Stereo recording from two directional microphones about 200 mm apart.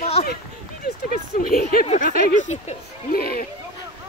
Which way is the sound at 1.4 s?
50° left (ahead or behind).